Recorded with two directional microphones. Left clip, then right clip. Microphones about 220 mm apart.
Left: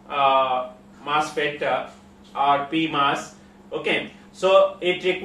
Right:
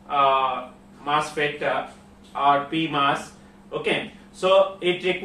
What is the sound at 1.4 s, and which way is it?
Speech, 5° left (ahead or behind).